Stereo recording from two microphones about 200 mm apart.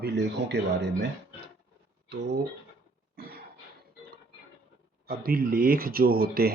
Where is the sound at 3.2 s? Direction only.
50° right (ahead or behind).